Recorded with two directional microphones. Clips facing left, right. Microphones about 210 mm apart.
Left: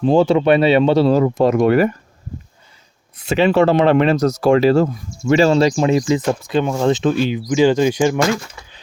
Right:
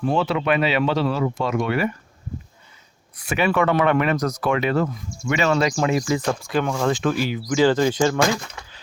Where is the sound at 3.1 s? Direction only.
25° left (ahead or behind).